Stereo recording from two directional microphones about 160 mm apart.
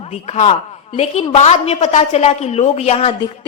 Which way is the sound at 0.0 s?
45° left (ahead or behind).